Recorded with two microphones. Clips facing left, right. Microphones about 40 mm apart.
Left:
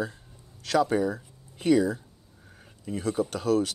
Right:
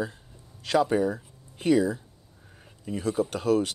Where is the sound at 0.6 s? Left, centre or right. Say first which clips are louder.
Right 1 dB; centre.